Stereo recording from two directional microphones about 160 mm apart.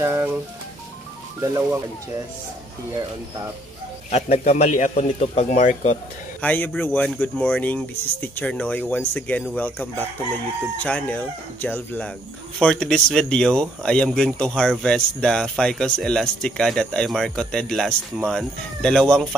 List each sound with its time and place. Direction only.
0.0 s speech: 15° right (ahead or behind)
4.1 s speech: 45° left (ahead or behind)
6.4 s speech: 10° left (ahead or behind)